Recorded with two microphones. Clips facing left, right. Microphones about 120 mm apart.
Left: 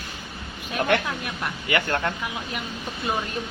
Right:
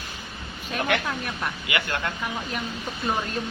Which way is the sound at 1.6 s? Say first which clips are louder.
Left 6 dB; 40° left (ahead or behind).